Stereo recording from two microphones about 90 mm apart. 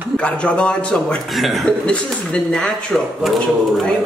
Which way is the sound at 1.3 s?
Centre (ahead or behind).